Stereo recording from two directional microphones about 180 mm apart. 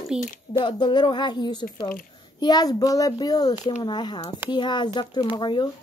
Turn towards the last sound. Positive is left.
turn(degrees=25)  # may be behind; listen again after turning